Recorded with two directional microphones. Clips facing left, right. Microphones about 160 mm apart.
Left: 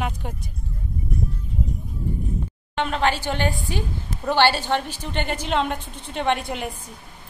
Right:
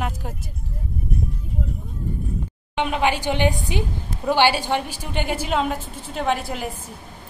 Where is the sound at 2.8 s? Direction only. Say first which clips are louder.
Right 1 dB; 10° right (ahead or behind).